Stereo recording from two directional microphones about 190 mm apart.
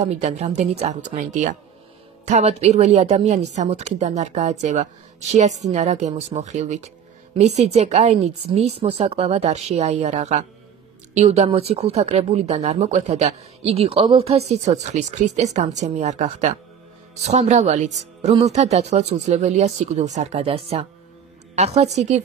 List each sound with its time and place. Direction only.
0.0 s speech: 35° right (ahead or behind)